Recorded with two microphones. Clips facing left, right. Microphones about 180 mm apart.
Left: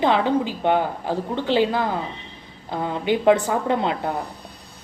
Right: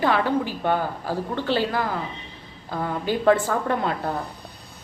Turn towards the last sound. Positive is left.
turn(degrees=20)  # may be behind; listen again after turning